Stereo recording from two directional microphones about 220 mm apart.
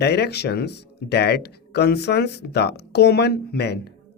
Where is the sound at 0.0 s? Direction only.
50° left (ahead or behind).